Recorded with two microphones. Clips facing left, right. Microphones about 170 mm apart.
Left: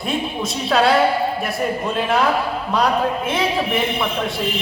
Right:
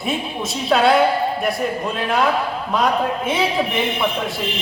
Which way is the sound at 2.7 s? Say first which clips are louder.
Even; centre (ahead or behind).